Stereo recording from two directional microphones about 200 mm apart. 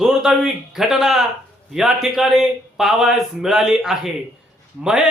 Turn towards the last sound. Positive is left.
turn(degrees=-5)  # may be behind; listen again after turning